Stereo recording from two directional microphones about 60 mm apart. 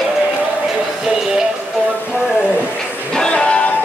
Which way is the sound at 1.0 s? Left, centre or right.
Centre.